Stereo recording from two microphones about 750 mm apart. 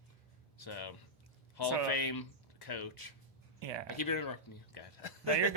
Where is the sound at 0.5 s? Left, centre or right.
Left.